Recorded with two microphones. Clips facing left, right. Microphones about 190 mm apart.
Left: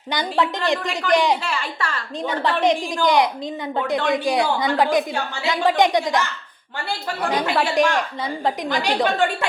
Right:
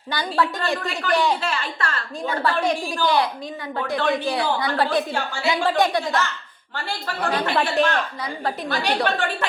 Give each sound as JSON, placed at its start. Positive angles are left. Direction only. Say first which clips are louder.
{"t": 0.1, "sound": "a woman's voice", "louder": "left 2 dB", "side_deg": 20}
{"t": 7.3, "sound": "a woman's voice", "louder": "left 1 dB", "side_deg": 15}